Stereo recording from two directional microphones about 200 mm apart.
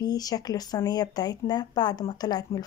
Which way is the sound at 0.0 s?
20° left (ahead or behind).